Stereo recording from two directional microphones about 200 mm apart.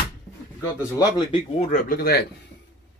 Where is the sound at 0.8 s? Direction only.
20° left (ahead or behind).